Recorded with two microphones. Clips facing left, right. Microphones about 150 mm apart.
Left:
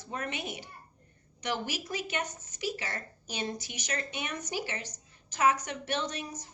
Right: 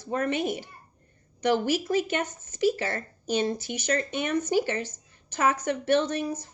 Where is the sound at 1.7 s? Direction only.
50° right (ahead or behind).